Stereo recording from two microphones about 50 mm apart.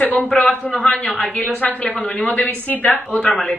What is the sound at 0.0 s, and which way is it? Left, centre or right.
A man's voice, left.